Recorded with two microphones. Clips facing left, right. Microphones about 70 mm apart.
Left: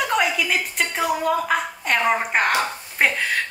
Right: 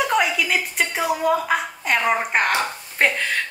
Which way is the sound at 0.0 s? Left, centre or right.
Centre.